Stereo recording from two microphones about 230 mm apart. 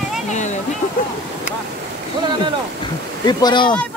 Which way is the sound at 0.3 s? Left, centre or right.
Left.